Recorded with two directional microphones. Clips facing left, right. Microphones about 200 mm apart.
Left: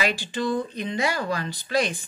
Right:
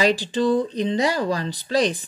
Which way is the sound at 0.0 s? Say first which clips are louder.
Right 6 dB; 35° right (ahead or behind).